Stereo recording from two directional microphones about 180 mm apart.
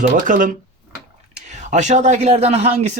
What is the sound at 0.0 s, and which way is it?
Speech, 45° right (ahead or behind).